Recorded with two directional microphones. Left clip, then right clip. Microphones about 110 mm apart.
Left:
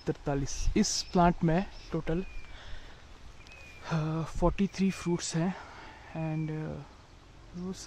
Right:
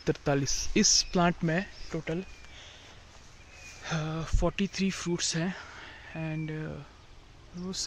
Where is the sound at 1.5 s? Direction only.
25° left (ahead or behind).